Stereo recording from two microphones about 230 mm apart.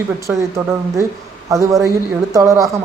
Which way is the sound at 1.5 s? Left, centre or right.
Centre.